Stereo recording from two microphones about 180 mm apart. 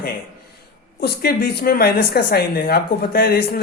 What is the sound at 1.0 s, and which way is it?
Speech, 60° left (ahead or behind).